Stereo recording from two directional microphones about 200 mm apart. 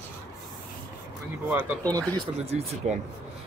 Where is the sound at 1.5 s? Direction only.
15° right (ahead or behind).